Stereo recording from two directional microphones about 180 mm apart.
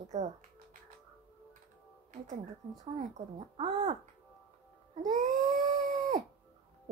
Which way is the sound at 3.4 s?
30° right (ahead or behind).